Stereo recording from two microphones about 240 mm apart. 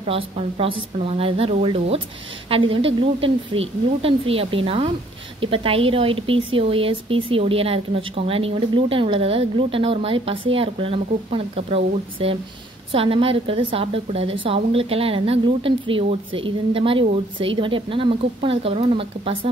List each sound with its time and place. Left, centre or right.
0.0 s a woman's voice: right